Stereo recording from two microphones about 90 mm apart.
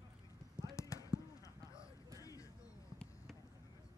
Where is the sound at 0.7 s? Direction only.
40° left (ahead or behind).